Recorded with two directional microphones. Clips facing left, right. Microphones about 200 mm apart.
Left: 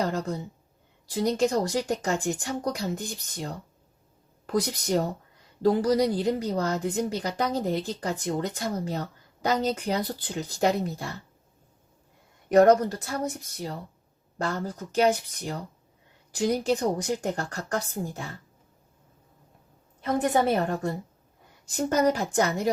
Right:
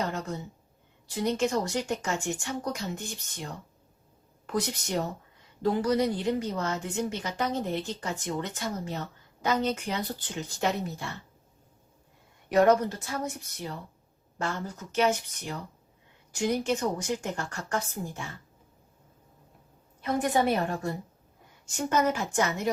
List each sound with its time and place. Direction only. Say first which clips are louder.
0.0 s a woman's voice: left 4 dB; 35° left (ahead or behind)
12.5 s a woman's voice: left 4 dB; 40° left (ahead or behind)
20.0 s a woman's voice: left 2 dB; 40° left (ahead or behind)